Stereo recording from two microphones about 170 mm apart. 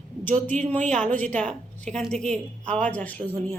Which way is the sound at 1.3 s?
5° left (ahead or behind).